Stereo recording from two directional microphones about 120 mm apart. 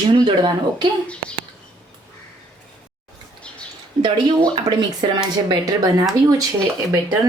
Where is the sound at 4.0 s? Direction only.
35° right (ahead or behind).